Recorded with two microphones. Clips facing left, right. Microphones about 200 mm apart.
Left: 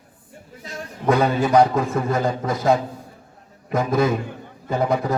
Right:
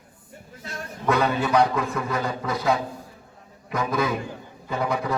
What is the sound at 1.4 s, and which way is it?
Speech, 45° left (ahead or behind).